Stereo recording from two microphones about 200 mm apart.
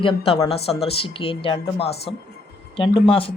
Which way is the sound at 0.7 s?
30° left (ahead or behind).